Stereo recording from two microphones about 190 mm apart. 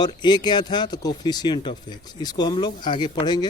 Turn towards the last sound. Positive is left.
turn(degrees=20)  # may be behind; listen again after turning